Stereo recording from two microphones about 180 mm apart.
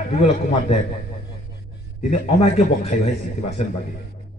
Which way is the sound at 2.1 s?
40° left (ahead or behind).